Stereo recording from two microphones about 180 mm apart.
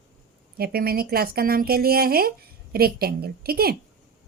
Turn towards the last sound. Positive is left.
turn(degrees=-60)  # may be behind; listen again after turning